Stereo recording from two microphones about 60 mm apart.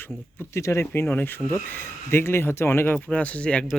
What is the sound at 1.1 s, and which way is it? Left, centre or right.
Speech, left.